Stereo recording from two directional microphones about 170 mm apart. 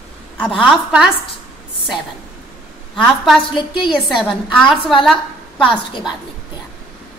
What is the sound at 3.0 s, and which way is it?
Speech, centre (ahead or behind).